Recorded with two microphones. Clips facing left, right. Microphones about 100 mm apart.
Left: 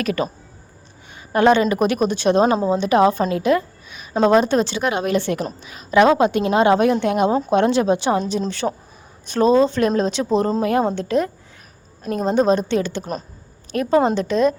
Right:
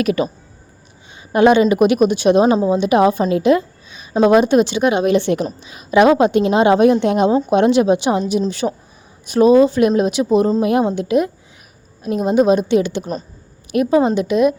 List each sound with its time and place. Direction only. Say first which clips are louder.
0.0 s a woman's voice: right 4 dB; 20° right (ahead or behind)
1.3 s a woman's voice: right 3 dB; 15° right (ahead or behind)
3.3 s a sound: right 4 dB; 20° right (ahead or behind)
4.2 s a woman's voice: right 3 dB; 15° right (ahead or behind)